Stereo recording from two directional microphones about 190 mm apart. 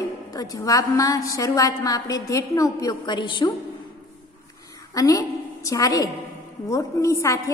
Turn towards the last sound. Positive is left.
turn(degrees=15)  # may be behind; listen again after turning